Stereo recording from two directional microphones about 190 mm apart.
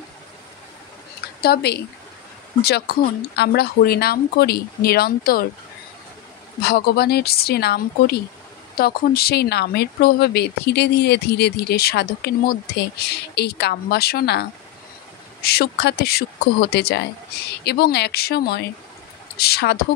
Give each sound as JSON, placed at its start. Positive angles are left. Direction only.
{"t": 1.4, "sound": "speech", "side_deg": 55}
{"t": 6.6, "sound": "speech", "side_deg": 55}
{"t": 15.4, "sound": "speech", "side_deg": 55}